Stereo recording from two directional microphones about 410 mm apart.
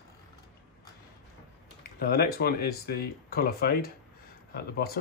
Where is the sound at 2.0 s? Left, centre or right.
Left.